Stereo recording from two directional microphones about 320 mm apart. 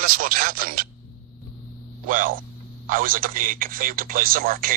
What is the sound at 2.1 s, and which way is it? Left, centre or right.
Speech, right.